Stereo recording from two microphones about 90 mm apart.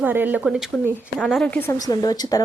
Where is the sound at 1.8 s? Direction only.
45° left (ahead or behind).